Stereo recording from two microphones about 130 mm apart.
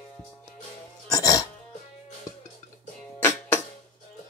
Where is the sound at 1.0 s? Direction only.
25° left (ahead or behind).